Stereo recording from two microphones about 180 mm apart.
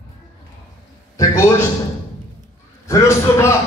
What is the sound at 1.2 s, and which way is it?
Speech, 15° left (ahead or behind).